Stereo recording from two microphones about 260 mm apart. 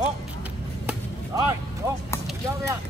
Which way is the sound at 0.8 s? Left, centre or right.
Centre.